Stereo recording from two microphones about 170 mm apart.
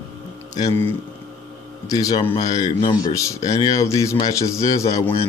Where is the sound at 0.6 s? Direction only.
15° left (ahead or behind).